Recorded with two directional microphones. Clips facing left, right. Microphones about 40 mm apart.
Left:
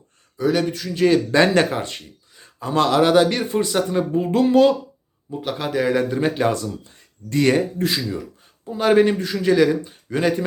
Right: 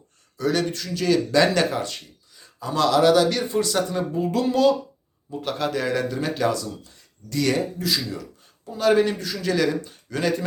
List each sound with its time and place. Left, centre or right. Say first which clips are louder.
0.3 s speech: left 3 dB; centre
0.9 s speech: left 3 dB; left
5.4 s speech: left 3 dB; centre; by 9.6 s left
9.6 s speech: left 5 dB; centre